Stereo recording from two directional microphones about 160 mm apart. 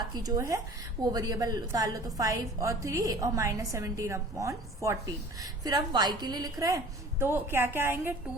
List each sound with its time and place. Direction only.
0.0 s a woman's voice: 25° right (ahead or behind)